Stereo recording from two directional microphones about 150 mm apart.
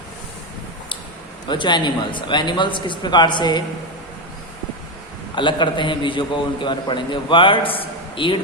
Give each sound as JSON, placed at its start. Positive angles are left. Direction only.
{"t": 1.5, "sound": "a man's voice", "side_deg": 30}
{"t": 5.3, "sound": "a man's voice", "side_deg": 30}